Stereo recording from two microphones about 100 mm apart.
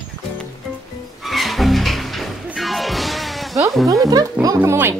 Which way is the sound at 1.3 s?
Centre (ahead or behind).